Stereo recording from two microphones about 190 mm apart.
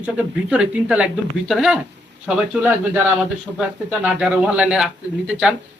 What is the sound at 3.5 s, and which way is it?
Speech, 5° right (ahead or behind).